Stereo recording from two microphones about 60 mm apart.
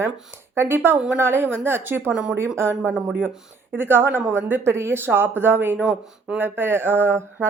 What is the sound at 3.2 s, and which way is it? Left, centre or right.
Speech, right.